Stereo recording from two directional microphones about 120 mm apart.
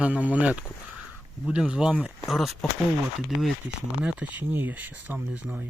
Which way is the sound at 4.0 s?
10° right (ahead or behind).